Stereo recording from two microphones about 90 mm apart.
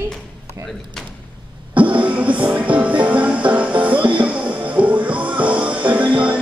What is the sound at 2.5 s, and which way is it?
Music, 15° right (ahead or behind).